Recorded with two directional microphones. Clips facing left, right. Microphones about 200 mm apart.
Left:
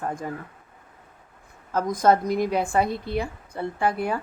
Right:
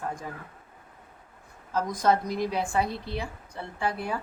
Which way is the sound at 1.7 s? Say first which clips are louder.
Left 4 dB; 50° left (ahead or behind).